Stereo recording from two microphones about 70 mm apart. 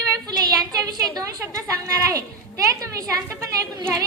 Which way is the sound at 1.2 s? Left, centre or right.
Right.